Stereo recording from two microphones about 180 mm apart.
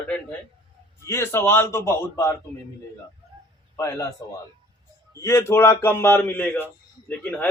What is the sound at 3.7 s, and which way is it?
Speech, 15° left (ahead or behind).